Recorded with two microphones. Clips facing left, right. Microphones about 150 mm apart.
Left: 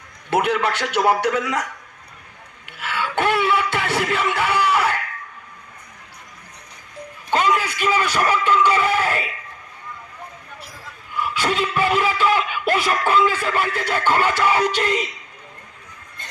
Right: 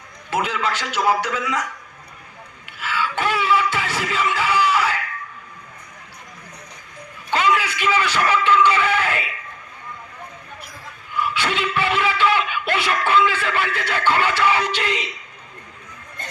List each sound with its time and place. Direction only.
0.3 s a man's voice: 60° left (ahead or behind)
2.6 s a sound: 55° left (ahead or behind)
7.3 s a man's voice: 45° left (ahead or behind)
11.3 s music: 40° left (ahead or behind)